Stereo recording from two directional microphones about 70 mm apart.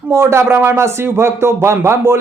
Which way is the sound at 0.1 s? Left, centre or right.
Right.